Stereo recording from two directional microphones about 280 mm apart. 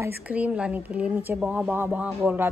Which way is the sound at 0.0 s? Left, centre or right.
Centre.